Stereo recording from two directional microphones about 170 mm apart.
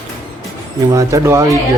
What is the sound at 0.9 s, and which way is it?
Speech, 15° right (ahead or behind).